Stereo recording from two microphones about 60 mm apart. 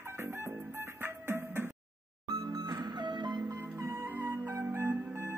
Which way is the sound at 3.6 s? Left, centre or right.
Right.